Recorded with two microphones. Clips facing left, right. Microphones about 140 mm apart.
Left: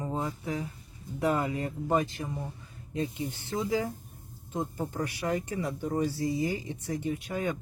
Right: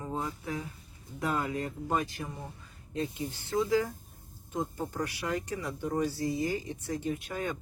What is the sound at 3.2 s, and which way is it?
Speech, 15° left (ahead or behind).